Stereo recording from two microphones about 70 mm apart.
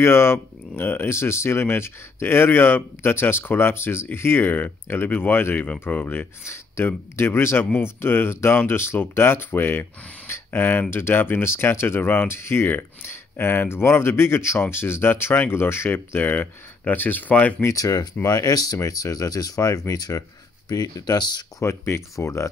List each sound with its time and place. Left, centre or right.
0.0 s speech: left
5.6 s speech: left
6.4 s speech: left
17.7 s speech: left
21.5 s speech: left